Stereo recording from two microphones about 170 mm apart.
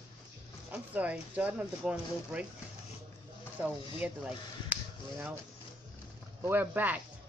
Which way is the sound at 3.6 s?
10° right (ahead or behind).